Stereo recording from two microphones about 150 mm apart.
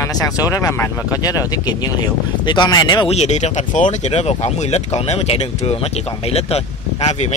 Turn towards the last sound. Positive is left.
turn(degrees=45)  # may be behind; listen again after turning